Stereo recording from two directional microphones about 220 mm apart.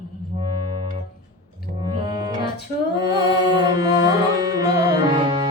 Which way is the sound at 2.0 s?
15° right (ahead or behind).